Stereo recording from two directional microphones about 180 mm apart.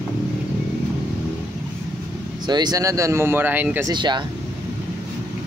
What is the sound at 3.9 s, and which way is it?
Speech, 25° right (ahead or behind).